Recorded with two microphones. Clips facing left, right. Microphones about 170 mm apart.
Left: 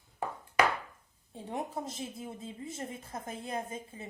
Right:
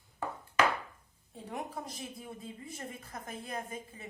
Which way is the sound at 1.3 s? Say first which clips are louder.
Left 3 dB; 25° left (ahead or behind).